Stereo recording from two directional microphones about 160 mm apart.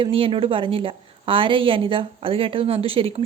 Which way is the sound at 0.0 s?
35° right (ahead or behind).